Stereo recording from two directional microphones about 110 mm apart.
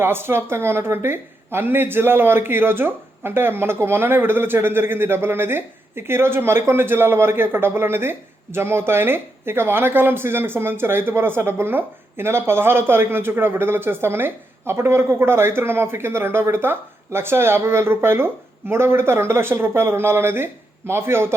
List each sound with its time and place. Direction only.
0.0 s speech: 20° right (ahead or behind)